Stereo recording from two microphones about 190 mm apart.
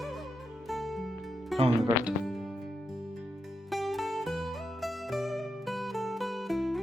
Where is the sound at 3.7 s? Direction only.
Centre (ahead or behind).